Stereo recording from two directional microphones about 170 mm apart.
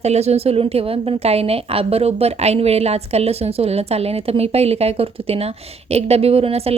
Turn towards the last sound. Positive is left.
turn(degrees=-35)  # may be behind; listen again after turning